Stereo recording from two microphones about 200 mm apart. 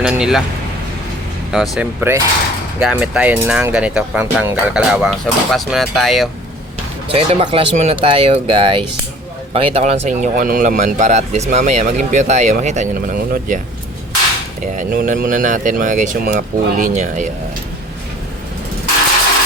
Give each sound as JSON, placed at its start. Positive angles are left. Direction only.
{"t": 0.0, "sound": "speech", "side_deg": -5}
{"t": 1.5, "sound": "cutlery", "side_deg": 0}
{"t": 7.1, "sound": "speech", "side_deg": -30}
{"t": 14.6, "sound": "speech", "side_deg": -40}